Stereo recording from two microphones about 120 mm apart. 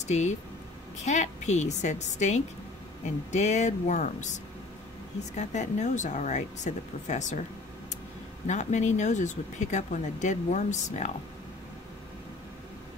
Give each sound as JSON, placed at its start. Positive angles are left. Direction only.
{"t": 0.0, "sound": "a woman's voice", "side_deg": 75}
{"t": 5.3, "sound": "speech", "side_deg": 75}
{"t": 8.5, "sound": "speech", "side_deg": 75}